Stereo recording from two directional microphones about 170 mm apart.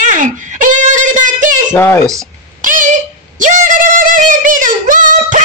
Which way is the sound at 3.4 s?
50° right (ahead or behind).